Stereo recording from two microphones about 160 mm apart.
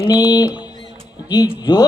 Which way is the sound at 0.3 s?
25° left (ahead or behind).